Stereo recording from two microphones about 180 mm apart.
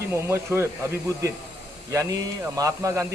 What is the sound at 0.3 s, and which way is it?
Speech, 15° right (ahead or behind).